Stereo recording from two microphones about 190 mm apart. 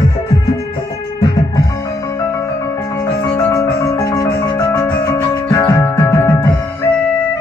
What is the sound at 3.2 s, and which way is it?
Music, 10° left (ahead or behind).